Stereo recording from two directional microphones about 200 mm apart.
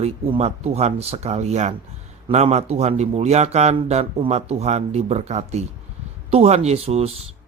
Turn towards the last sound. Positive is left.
turn(degrees=-30)  # may be behind; listen again after turning